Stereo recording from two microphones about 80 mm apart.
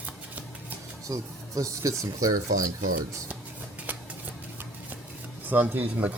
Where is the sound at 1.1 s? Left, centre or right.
Right.